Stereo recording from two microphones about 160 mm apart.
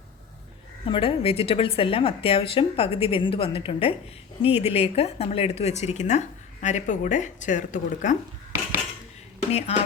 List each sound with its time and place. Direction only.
0.9 s a woman's voice: 35° left (ahead or behind); by 8.1 s 50° left (ahead or behind)
9.5 s a woman's voice: 40° left (ahead or behind)